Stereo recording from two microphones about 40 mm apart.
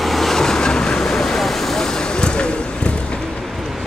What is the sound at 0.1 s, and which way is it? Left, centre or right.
Vehicle, centre.